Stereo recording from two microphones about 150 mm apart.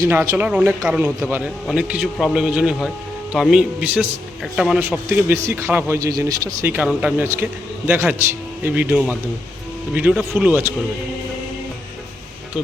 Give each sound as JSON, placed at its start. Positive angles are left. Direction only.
{"t": 0.0, "sound": "a man's voice", "side_deg": -20}
{"t": 4.8, "sound": "speech", "side_deg": -15}